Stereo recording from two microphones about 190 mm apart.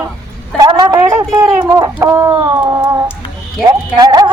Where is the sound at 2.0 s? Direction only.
15° right (ahead or behind).